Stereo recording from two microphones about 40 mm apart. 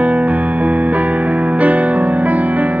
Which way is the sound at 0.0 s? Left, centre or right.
Right.